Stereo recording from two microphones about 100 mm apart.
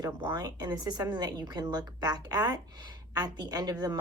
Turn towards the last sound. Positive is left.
turn(degrees=-45)  # may be behind; listen again after turning